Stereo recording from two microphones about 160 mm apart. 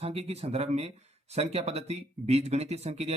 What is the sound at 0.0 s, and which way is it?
Speech, 40° right (ahead or behind).